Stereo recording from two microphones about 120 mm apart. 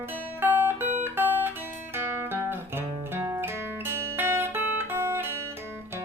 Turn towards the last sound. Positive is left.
turn(degrees=-20)  # may be behind; listen again after turning